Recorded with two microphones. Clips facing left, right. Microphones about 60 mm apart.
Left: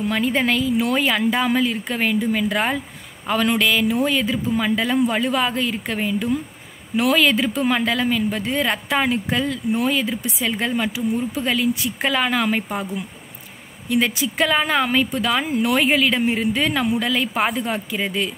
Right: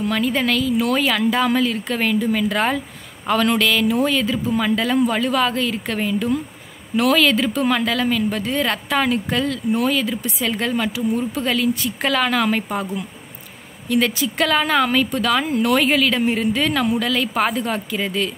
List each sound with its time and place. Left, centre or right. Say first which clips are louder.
0.1 s speech: left 1 dB; centre